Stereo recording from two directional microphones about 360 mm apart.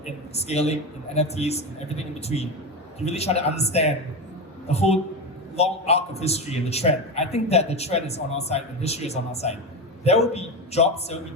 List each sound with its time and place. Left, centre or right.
0.3 s a man's voice: centre